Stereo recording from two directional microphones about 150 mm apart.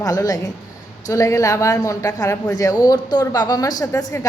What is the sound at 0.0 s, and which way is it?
A woman's voice, 25° left (ahead or behind).